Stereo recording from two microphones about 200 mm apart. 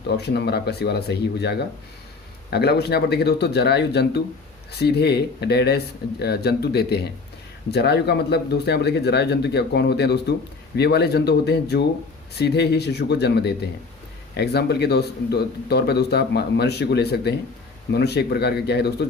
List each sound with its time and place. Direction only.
0.1 s speech: 55° left (ahead or behind)